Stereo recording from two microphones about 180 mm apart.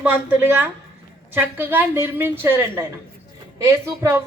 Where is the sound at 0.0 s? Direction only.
10° right (ahead or behind).